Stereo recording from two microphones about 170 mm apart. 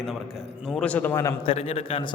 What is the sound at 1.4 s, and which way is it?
Speech, 35° left (ahead or behind).